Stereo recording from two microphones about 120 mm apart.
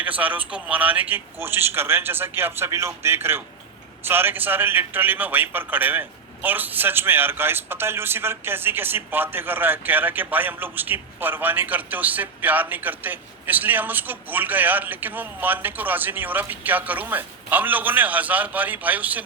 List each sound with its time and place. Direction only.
0.0 s a man's voice: 15° right (ahead or behind)